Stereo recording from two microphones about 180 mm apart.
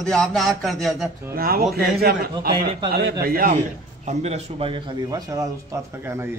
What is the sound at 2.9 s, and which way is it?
Speech, 60° right (ahead or behind).